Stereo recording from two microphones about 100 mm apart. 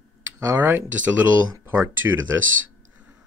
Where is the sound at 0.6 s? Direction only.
20° right (ahead or behind).